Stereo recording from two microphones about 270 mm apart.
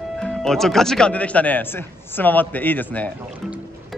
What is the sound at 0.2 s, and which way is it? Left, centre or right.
Speech, centre.